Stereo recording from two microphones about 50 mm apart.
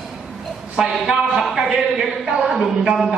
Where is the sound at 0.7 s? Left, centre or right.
Centre.